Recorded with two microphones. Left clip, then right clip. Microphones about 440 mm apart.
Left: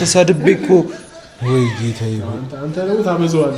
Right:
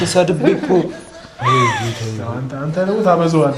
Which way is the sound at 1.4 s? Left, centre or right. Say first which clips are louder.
Right 5 dB; right.